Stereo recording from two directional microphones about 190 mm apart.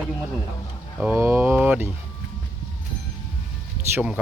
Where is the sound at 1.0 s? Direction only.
5° right (ahead or behind).